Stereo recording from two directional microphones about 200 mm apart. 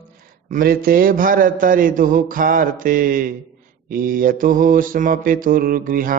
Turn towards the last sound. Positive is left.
turn(degrees=-45)  # may be behind; listen again after turning